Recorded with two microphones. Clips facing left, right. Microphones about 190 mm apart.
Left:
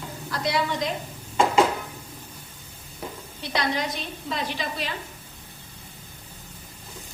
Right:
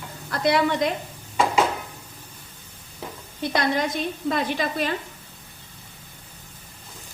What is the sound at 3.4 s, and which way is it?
A woman's voice, 50° right (ahead or behind).